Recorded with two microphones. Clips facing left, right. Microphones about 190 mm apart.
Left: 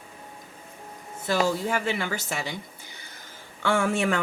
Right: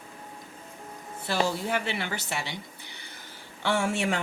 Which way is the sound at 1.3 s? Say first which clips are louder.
Left 3 dB; 45° left (ahead or behind).